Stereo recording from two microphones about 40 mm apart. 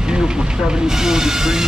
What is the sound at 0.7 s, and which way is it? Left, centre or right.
Speech, centre.